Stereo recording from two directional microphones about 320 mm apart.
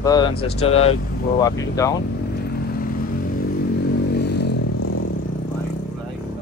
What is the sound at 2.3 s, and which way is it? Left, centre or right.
Vehicle, left.